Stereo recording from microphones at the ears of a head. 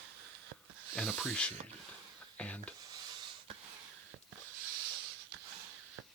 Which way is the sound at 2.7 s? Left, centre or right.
Right.